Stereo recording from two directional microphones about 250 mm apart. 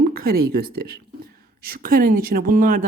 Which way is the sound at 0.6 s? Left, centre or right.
Right.